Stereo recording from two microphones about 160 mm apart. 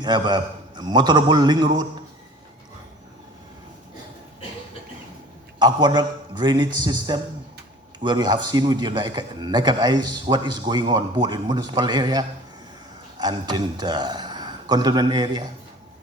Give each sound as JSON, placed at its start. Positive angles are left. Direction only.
{"t": 0.0, "sound": "a man's voice", "side_deg": -25}
{"t": 5.5, "sound": "a man's voice", "side_deg": -30}